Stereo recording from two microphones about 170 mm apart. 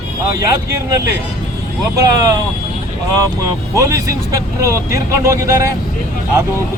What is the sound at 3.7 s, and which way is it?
Speech, 20° right (ahead or behind).